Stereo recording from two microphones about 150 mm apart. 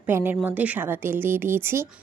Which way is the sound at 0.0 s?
15° right (ahead or behind).